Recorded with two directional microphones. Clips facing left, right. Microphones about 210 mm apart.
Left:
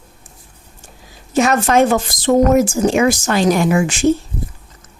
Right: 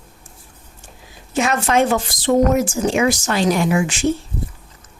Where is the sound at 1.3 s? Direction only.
40° left (ahead or behind).